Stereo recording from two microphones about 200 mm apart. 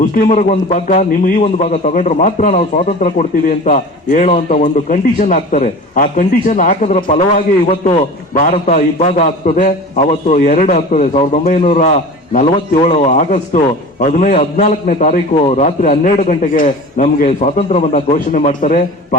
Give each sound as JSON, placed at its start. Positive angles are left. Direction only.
{"t": 0.0, "sound": "a man's voice", "side_deg": 40}